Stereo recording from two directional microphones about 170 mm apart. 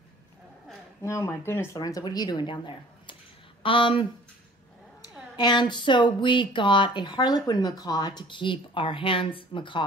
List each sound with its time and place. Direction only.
1.0 s speech: 15° left (ahead or behind)
5.4 s speech: 25° left (ahead or behind)